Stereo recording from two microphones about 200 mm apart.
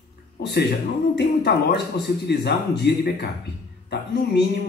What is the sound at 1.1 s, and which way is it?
Speech, 55° left (ahead or behind).